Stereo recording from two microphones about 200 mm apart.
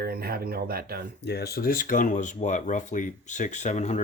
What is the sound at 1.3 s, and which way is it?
Speech, 50° left (ahead or behind).